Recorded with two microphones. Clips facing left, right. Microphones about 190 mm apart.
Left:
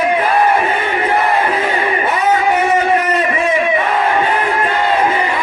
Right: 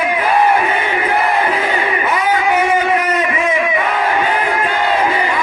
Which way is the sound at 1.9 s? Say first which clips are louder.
Left 3 dB; 30° left (ahead or behind).